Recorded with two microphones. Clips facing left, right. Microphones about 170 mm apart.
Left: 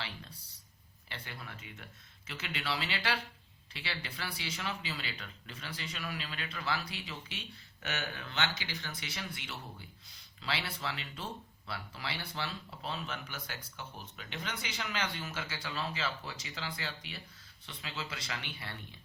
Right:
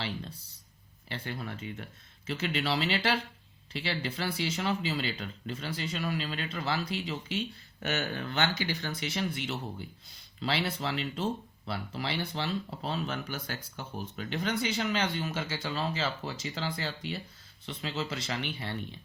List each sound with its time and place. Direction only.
1.0 s speech: 30° right (ahead or behind)
7.9 s speech: 40° right (ahead or behind); by 12.5 s 25° right (ahead or behind)
12.8 s speech: 35° right (ahead or behind)